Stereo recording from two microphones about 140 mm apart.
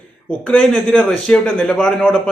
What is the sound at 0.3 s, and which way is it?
A man's voice, 10° left (ahead or behind).